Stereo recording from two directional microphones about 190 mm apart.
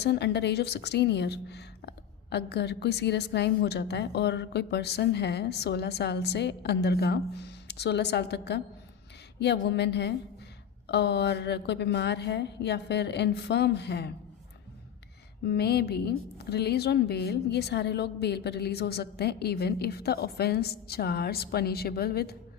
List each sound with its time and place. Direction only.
0.0 s a woman's voice: 60° left (ahead or behind)
15.4 s a woman's voice: 60° left (ahead or behind)